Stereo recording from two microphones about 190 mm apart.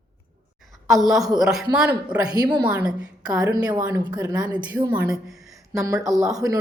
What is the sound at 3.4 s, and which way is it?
A woman's voice, 20° right (ahead or behind).